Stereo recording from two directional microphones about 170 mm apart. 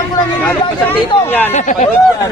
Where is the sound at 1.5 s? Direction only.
45° left (ahead or behind).